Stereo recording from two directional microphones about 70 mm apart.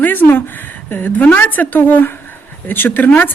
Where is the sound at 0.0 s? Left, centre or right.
Left.